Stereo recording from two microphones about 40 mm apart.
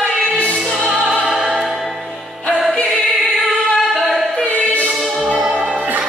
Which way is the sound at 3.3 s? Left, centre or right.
Centre.